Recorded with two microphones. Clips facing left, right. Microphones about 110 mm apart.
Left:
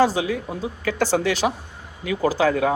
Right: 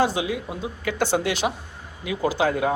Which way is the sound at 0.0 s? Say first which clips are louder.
Left 3 dB; 40° left (ahead or behind).